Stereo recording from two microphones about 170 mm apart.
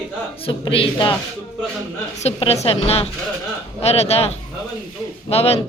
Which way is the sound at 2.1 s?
40° left (ahead or behind).